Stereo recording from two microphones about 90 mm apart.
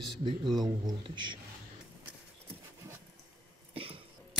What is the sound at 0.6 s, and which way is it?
Speech, 50° right (ahead or behind).